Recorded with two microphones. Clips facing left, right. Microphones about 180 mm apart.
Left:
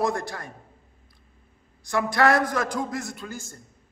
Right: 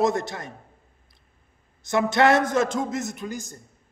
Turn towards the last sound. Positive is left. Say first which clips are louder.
# right 4 dB
turn(degrees=-20)  # may be behind; listen again after turning